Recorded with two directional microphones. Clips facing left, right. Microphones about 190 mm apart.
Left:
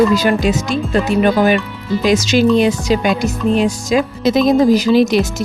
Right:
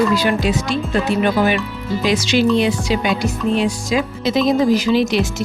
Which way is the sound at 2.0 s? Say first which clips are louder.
Left 3 dB; 45° left (ahead or behind).